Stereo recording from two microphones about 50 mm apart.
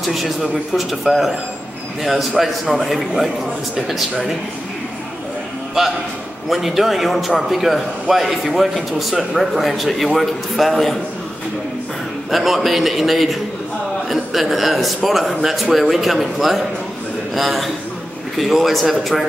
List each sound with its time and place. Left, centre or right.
0.0 s a man's voice: centre
6.5 s a man's voice: centre
12.3 s a man's voice: centre